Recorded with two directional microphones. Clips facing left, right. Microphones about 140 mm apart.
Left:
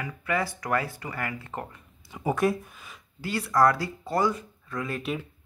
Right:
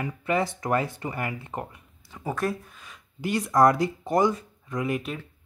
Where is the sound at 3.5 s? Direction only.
20° right (ahead or behind).